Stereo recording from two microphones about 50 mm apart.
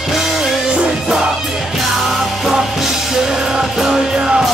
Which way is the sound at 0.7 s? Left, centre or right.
Centre.